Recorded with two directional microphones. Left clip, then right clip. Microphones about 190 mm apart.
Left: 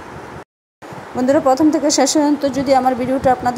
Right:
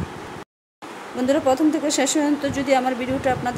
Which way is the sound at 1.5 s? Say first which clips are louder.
Left 6 dB; centre (ahead or behind).